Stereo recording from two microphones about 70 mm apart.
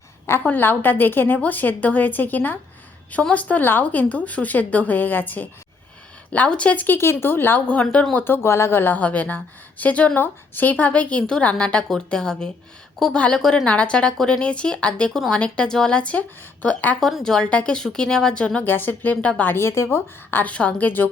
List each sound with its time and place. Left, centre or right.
0.4 s a woman's voice: left
7.7 s a woman's voice: centre
8.1 s a woman's voice: left; by 13.4 s centre
13.4 s a woman's voice: centre
13.7 s a woman's voice: centre
17.0 s a woman's voice: centre
17.3 s a woman's voice: centre
18.6 s a woman's voice: left
19.5 s speech: left
20.3 s a woman's voice: centre